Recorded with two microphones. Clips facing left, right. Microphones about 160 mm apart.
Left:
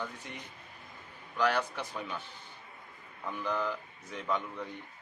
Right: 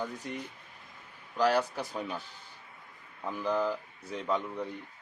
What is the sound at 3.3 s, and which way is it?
Speech, 35° right (ahead or behind).